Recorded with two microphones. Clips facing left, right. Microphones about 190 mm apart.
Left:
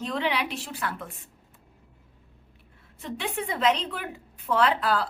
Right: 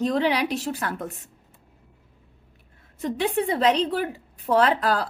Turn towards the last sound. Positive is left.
turn(degrees=-40)  # may be behind; listen again after turning